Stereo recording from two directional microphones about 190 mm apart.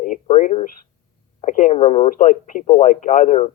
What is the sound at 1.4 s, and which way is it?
Speech, 40° left (ahead or behind).